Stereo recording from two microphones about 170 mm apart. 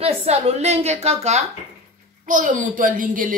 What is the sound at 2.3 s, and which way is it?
A woman's voice, 50° right (ahead or behind).